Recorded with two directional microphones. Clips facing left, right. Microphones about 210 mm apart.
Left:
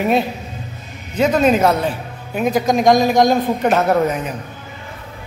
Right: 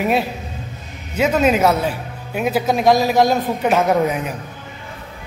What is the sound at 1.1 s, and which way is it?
Speech, 5° right (ahead or behind).